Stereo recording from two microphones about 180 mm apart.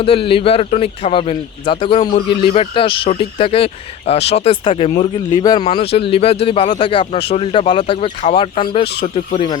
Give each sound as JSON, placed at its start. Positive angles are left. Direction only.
{"t": 0.0, "sound": "speech", "side_deg": 30}